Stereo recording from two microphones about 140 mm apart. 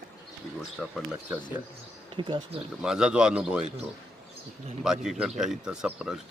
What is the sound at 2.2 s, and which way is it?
Speech, 35° right (ahead or behind).